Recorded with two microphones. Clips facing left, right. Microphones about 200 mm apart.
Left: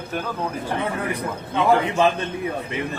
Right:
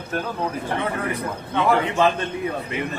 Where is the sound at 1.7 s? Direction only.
20° left (ahead or behind).